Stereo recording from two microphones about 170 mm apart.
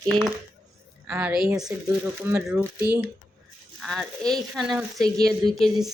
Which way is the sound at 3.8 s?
Centre (ahead or behind).